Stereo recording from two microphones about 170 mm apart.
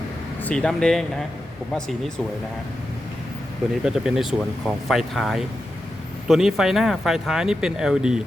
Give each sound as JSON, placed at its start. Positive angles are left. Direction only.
{"t": 0.4, "sound": "speech", "side_deg": 5}
{"t": 3.8, "sound": "speech", "side_deg": -5}